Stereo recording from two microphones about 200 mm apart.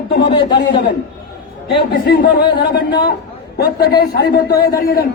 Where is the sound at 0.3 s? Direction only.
25° left (ahead or behind).